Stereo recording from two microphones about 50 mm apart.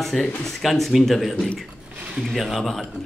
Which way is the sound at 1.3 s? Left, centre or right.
Centre.